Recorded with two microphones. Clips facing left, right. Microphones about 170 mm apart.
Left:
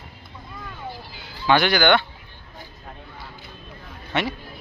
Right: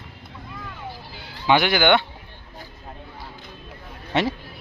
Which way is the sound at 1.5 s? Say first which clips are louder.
Even; 15° right (ahead or behind).